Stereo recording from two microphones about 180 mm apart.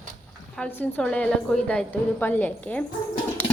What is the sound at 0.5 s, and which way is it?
A woman's voice, 10° left (ahead or behind).